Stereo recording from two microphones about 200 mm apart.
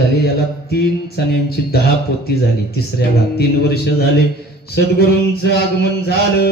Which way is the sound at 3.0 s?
55° left (ahead or behind).